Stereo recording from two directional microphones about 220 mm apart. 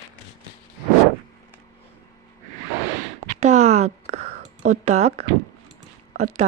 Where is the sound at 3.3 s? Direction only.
30° right (ahead or behind).